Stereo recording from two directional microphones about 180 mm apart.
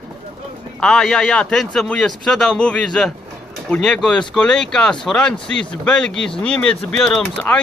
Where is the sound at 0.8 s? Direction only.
5° left (ahead or behind).